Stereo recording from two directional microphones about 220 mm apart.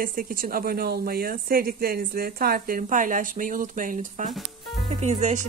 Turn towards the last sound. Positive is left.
turn(degrees=-35)  # may be behind; listen again after turning